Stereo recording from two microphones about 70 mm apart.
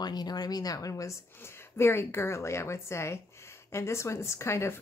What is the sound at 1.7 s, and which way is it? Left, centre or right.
Speech, left.